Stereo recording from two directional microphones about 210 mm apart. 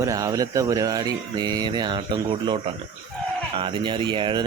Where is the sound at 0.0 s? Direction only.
15° right (ahead or behind).